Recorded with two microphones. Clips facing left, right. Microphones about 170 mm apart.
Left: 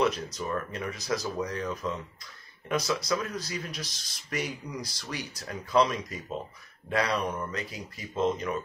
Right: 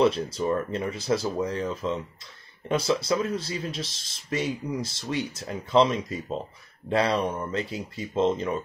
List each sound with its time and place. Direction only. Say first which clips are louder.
0.0 s speech: right 5 dB; 30° right (ahead or behind)